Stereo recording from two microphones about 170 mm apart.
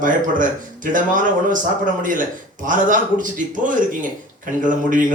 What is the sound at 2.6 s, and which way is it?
Speech, 50° right (ahead or behind).